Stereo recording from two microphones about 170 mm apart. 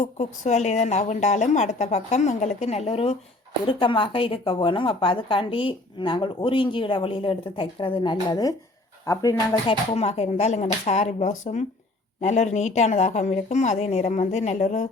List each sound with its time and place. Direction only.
0.0 s a woman's voice: 45° left (ahead or behind); by 9.6 s 20° left (ahead or behind)
9.6 s a woman's voice: 35° left (ahead or behind)